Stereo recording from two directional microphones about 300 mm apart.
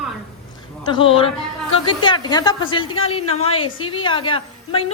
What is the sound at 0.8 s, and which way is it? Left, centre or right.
A woman's voice, centre.